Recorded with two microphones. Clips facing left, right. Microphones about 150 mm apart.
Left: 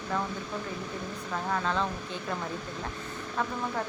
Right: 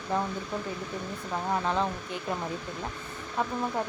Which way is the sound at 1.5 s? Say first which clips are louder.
Right 2 dB; 20° right (ahead or behind).